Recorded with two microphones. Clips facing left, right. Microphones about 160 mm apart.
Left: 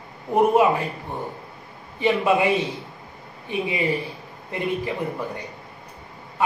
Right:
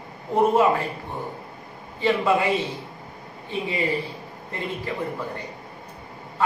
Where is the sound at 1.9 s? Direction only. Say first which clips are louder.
Left 1 dB; 15° left (ahead or behind).